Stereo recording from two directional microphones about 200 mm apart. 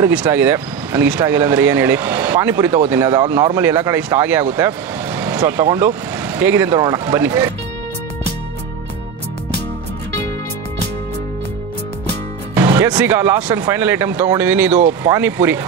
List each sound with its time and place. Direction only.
0.0 s speech: 10° right (ahead or behind)
12.5 s music: 20° right (ahead or behind)
12.8 s speech: 10° right (ahead or behind)